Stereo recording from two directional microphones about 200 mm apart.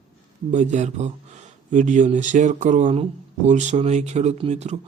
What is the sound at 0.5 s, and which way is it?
Speech, 35° right (ahead or behind).